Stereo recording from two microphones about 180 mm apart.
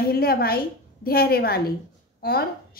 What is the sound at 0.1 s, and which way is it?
A woman's voice, 55° left (ahead or behind).